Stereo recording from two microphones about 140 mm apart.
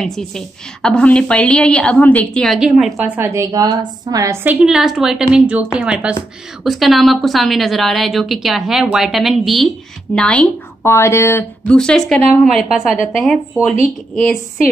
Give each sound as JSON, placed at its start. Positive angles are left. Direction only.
{"t": 0.0, "sound": "a woman's voice", "side_deg": 5}
{"t": 3.2, "sound": "a woman's voice", "side_deg": -20}
{"t": 11.7, "sound": "a woman's voice", "side_deg": 5}